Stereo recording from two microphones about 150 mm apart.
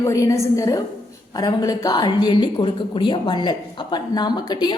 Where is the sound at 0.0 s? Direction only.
20° left (ahead or behind).